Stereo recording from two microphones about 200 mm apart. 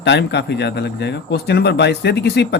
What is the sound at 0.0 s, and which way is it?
Speech, 60° left (ahead or behind).